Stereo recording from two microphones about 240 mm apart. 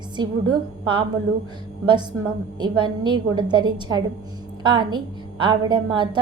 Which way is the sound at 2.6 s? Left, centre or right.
Centre.